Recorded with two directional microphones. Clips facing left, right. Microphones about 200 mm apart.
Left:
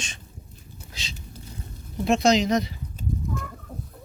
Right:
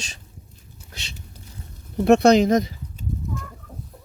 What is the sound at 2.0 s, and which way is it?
Speech, 60° right (ahead or behind).